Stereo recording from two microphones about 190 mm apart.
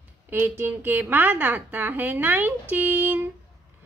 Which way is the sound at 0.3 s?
10° right (ahead or behind).